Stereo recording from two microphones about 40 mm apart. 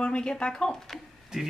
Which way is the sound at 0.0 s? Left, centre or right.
Left.